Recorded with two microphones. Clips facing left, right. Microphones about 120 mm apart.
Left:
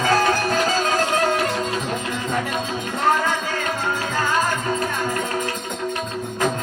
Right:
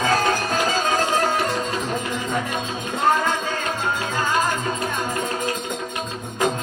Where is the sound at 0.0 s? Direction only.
20° right (ahead or behind).